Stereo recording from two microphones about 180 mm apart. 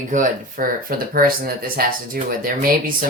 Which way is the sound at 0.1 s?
45° right (ahead or behind).